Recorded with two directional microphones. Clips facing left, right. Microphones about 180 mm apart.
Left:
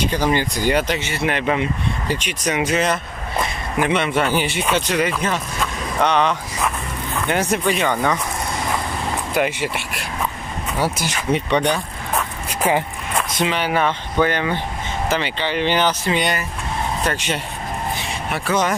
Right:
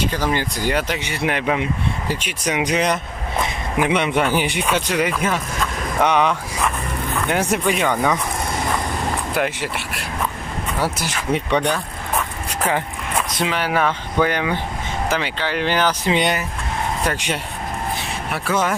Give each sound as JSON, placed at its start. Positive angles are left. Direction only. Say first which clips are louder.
{"t": 0.3, "sound": "speech", "louder": "left 2 dB", "side_deg": 0}
{"t": 9.4, "sound": "speech", "louder": "left 2 dB", "side_deg": 0}
{"t": 10.8, "sound": "speech", "louder": "left 2 dB", "side_deg": 0}
{"t": 13.4, "sound": "speech", "louder": "left 1 dB", "side_deg": -5}
{"t": 16.1, "sound": "speech", "louder": "right 2 dB", "side_deg": -15}